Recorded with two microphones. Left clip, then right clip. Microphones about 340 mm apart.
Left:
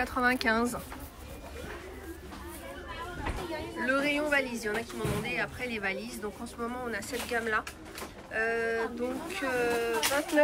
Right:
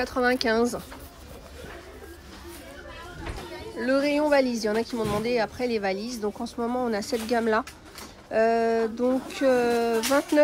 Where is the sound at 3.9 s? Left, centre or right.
Centre.